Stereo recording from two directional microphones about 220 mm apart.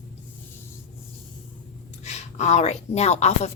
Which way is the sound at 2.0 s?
30° left (ahead or behind).